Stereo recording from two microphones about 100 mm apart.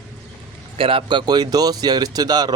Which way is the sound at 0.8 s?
65° right (ahead or behind).